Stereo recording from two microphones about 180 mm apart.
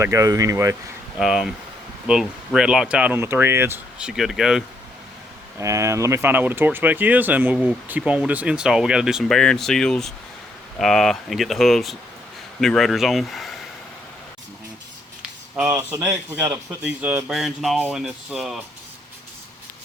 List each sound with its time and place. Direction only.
0.0 s speech: 20° right (ahead or behind)
1.2 s a man's voice: 5° right (ahead or behind)
5.5 s a man's voice: 15° right (ahead or behind); by 13.5 s centre (ahead or behind)
15.5 s a man's voice: 5° right (ahead or behind)